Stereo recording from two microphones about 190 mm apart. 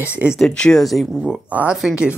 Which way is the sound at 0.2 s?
Centre (ahead or behind).